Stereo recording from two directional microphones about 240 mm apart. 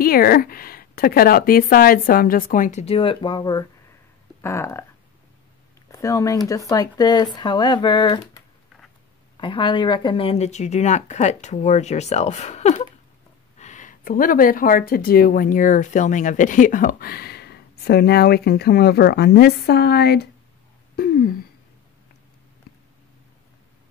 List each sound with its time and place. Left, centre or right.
0.0 s speech: left; by 4.8 s centre
5.9 s speech: centre
9.4 s speech: left
20.9 s a sound: left